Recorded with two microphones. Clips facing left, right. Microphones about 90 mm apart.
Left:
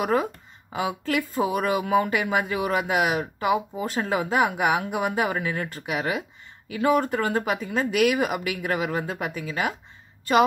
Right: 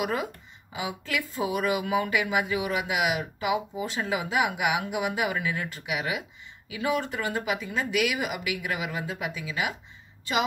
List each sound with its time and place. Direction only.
0.0 s speech: 40° left (ahead or behind)